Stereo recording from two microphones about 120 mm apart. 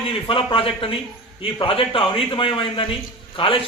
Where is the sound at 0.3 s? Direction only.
45° left (ahead or behind).